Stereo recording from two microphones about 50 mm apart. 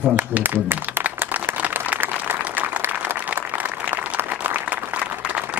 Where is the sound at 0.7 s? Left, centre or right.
Right.